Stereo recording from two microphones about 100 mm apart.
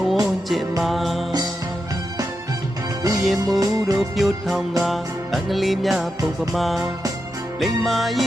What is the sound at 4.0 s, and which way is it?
Music, centre (ahead or behind).